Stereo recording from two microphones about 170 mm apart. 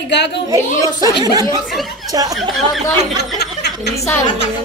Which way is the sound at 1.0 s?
20° right (ahead or behind).